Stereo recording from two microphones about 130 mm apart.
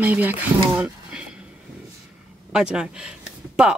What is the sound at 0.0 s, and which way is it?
Speech, 15° right (ahead or behind).